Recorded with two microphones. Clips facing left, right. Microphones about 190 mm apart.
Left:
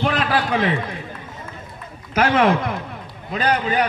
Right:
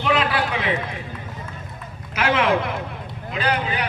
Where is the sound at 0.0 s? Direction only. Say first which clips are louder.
Left 1 dB; 40° left (ahead or behind).